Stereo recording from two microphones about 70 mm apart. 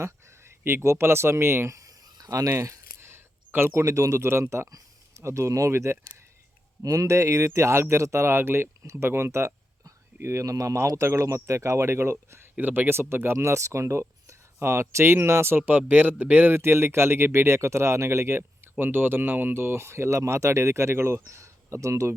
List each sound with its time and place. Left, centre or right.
0.0 s speech: right
1.7 s a sound: right
3.8 s speech: right
6.8 s speech: right
12.5 s speech: right
16.6 s speech: right